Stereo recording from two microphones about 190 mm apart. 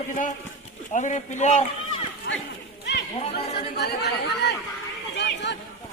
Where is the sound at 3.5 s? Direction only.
60° left (ahead or behind).